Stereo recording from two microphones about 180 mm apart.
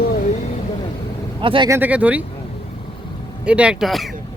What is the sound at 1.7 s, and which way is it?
Speech, 10° right (ahead or behind).